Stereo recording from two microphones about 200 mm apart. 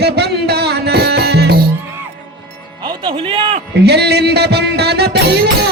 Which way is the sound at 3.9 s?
55° right (ahead or behind).